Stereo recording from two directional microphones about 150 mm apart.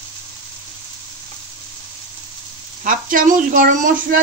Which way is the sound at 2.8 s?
65° right (ahead or behind).